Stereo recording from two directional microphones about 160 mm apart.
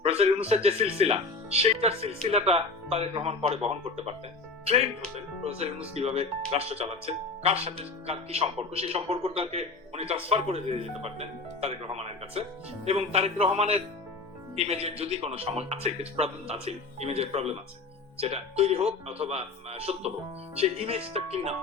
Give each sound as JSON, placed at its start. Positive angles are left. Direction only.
{"t": 0.0, "sound": "speech", "side_deg": -40}
{"t": 5.9, "sound": "speech", "side_deg": -40}